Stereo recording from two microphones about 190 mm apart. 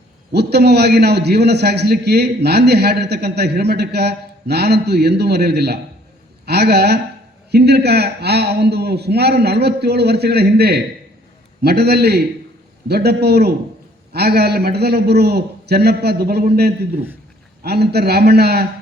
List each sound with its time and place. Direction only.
0.3 s a man's voice: 60° right (ahead or behind)